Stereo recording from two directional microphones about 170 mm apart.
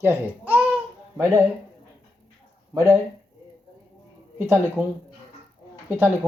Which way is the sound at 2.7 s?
15° right (ahead or behind).